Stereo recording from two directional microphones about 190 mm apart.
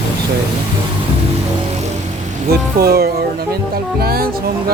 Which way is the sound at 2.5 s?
55° right (ahead or behind).